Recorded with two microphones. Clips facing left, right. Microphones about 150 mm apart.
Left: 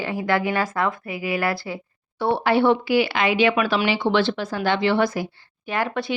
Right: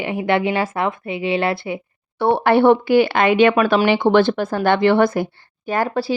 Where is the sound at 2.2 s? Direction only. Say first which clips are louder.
Right 5 dB; 55° right (ahead or behind).